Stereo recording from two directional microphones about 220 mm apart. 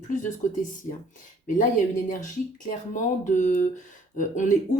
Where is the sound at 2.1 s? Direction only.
35° left (ahead or behind).